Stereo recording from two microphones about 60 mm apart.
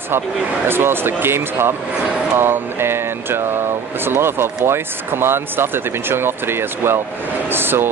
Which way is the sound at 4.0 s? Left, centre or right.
Right.